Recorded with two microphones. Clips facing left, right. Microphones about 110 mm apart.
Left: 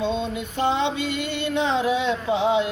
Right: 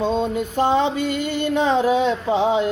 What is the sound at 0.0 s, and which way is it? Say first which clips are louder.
Music: right 5 dB; 45° right (ahead or behind).